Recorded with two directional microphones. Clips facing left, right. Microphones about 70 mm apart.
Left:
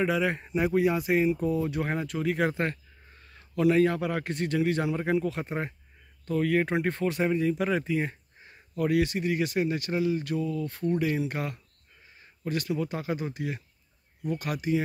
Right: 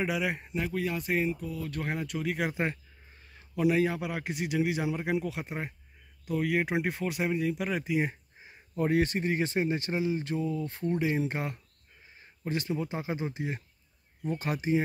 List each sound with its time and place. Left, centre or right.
0.0 s speech: centre
0.6 s speech: centre
1.0 s speech: centre
2.5 s speech: centre
3.3 s a sound: centre
3.7 s speech: centre
8.7 s speech: right